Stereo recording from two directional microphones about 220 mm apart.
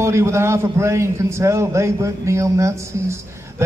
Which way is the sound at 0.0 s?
10° right (ahead or behind).